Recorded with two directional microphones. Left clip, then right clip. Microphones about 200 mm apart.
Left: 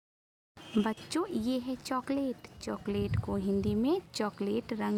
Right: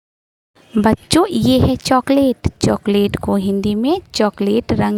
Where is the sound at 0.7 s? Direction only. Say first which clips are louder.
Right 18 dB; 45° right (ahead or behind).